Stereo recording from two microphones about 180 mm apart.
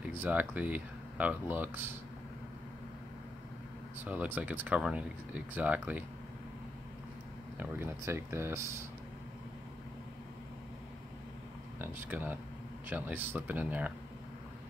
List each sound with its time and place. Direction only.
0.1 s speech: 10° right (ahead or behind)
4.0 s speech: 10° right (ahead or behind)
7.5 s speech: 15° right (ahead or behind)
11.8 s speech: 10° right (ahead or behind)